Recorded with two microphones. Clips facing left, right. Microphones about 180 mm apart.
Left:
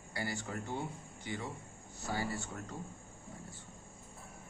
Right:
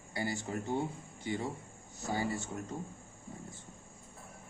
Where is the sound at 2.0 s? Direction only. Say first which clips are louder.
Right 3 dB; 20° right (ahead or behind).